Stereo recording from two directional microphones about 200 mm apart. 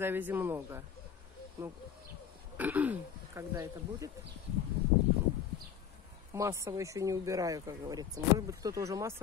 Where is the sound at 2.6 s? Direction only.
10° right (ahead or behind).